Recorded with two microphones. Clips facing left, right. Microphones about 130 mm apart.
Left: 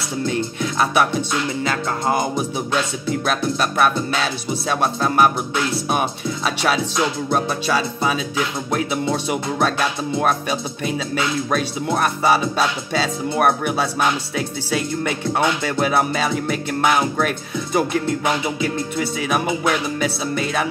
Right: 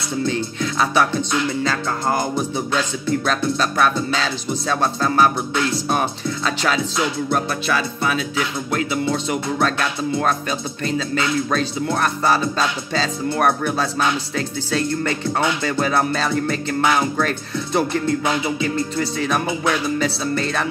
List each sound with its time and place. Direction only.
0.3 s music: 5° left (ahead or behind)